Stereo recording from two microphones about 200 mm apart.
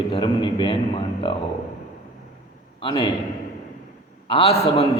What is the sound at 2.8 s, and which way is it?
Speech, 20° left (ahead or behind).